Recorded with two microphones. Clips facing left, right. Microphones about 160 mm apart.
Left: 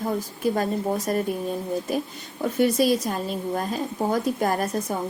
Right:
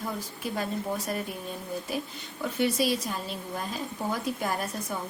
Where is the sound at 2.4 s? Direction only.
45° left (ahead or behind).